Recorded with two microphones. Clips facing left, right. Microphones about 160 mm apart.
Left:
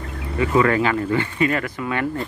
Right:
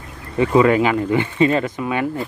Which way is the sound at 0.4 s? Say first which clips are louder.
Right 4 dB; 20° right (ahead or behind).